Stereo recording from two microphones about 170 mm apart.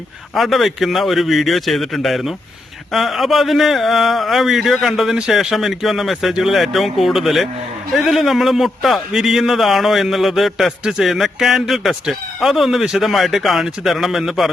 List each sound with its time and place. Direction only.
0.3 s a man's voice: centre (ahead or behind)